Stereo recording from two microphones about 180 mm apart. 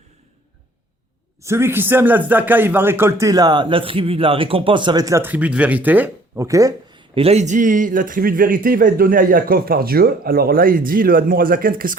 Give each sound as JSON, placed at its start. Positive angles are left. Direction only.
{"t": 1.4, "sound": "speech", "side_deg": -15}
{"t": 7.2, "sound": "a man's voice", "side_deg": -35}